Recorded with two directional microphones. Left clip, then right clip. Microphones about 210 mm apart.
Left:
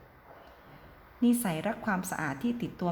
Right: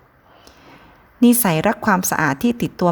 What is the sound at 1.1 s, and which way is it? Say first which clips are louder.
A woman's voice: right 13 dB; 50° right (ahead or behind).